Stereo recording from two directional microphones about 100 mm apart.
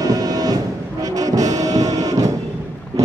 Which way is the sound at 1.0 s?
35° right (ahead or behind).